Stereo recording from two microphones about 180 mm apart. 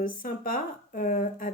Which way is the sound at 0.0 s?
50° left (ahead or behind).